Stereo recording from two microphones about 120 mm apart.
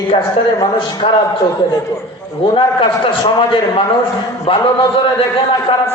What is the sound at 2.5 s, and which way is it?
Speech, 45° left (ahead or behind).